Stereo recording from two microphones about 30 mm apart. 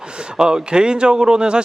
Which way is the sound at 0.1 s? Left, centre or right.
Right.